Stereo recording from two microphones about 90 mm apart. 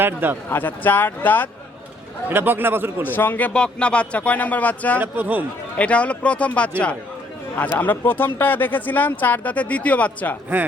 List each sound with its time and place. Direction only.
0.0 s a man's voice: 25° right (ahead or behind)
0.5 s speech: 20° left (ahead or behind)
2.3 s a man's voice: 25° right (ahead or behind)
3.1 s speech: 20° left (ahead or behind)
4.9 s a man's voice: 20° right (ahead or behind)
5.7 s speech: 15° left (ahead or behind)